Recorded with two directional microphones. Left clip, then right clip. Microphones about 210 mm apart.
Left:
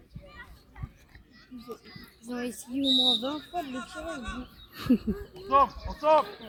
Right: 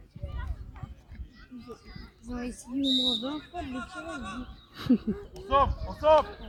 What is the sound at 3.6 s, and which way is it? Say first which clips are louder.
Speech: left 2 dB; 10° left (ahead or behind).